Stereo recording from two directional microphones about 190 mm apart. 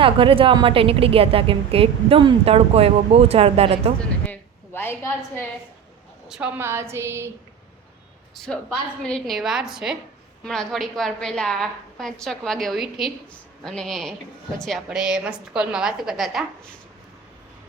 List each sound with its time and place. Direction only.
0.0 s a woman's voice: 30° right (ahead or behind)
4.3 s a sound: 10° left (ahead or behind)
6.2 s a woman's voice: 5° right (ahead or behind)
8.4 s a woman's voice: 5° left (ahead or behind)